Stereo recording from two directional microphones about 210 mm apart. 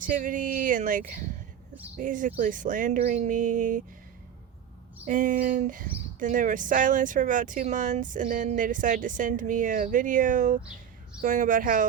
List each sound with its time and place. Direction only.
0.1 s speech: 40° right (ahead or behind)
5.0 s speech: 40° right (ahead or behind)